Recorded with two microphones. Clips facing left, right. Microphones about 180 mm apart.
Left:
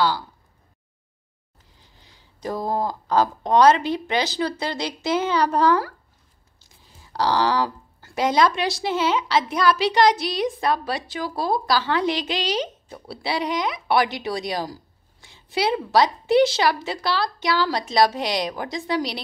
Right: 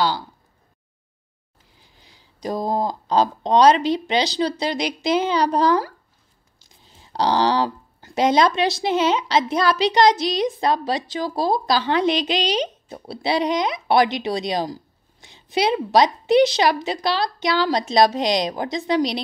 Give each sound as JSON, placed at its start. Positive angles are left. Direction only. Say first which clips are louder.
{"t": 1.8, "sound": "a sound", "louder": "right 1 dB", "side_deg": -15}
{"t": 4.4, "sound": "a woman's voice", "louder": "right 3 dB", "side_deg": -15}
{"t": 7.0, "sound": "speech", "louder": "right 2 dB", "side_deg": -20}